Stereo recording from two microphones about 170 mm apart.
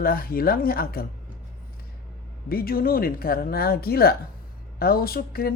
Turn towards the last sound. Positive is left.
turn(degrees=60)  # may be behind; listen again after turning